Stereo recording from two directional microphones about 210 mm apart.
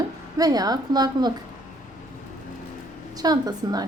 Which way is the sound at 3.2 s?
20° right (ahead or behind).